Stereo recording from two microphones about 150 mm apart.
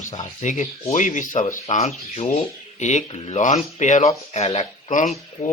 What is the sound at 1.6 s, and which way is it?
Speech, 45° left (ahead or behind).